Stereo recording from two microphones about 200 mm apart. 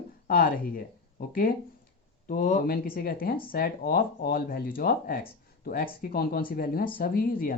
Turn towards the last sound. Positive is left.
turn(degrees=45)  # may be behind; listen again after turning